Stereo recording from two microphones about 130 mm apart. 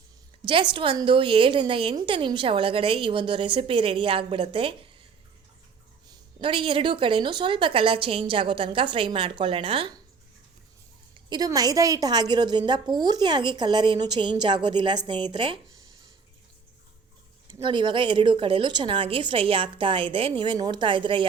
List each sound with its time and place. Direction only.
0.4 s a woman's voice: 40° right (ahead or behind)
6.1 s speech: 40° right (ahead or behind)
11.3 s a woman's voice: 30° right (ahead or behind)
17.5 s a woman's voice: 40° right (ahead or behind)